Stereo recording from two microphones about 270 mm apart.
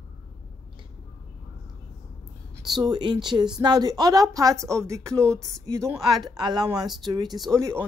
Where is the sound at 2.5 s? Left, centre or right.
Centre.